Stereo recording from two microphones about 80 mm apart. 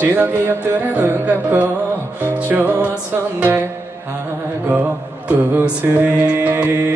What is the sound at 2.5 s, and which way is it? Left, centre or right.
Music, right.